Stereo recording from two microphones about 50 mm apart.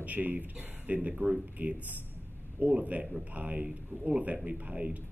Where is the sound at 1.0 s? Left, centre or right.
Right.